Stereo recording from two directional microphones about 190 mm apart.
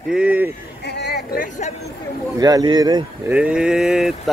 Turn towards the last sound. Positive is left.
turn(degrees=0)  # may be behind; listen again after turning